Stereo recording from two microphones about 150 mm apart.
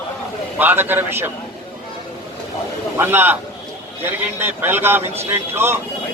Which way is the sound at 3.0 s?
15° right (ahead or behind).